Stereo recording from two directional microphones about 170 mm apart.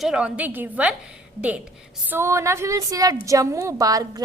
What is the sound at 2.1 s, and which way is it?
A woman's voice, 15° right (ahead or behind).